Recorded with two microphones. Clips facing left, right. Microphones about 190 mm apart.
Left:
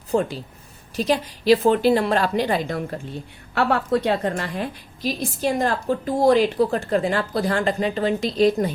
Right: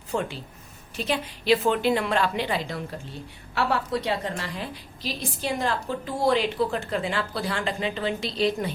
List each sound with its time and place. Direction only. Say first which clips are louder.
0.1 s a woman's voice: left 7 dB; 40° left (ahead or behind)